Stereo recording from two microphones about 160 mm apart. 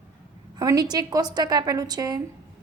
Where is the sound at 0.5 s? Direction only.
25° right (ahead or behind).